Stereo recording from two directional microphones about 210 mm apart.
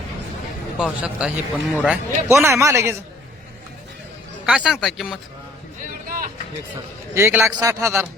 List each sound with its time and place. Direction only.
0.8 s a man's voice: 5° right (ahead or behind)
4.4 s a man's voice: 5° right (ahead or behind)
6.1 s vehicle: 40° right (ahead or behind)
7.1 s a man's voice: 10° right (ahead or behind)